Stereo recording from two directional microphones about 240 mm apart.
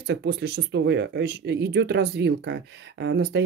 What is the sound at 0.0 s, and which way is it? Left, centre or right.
Speech, right.